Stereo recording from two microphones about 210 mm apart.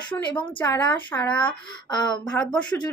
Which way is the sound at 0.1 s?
15° left (ahead or behind).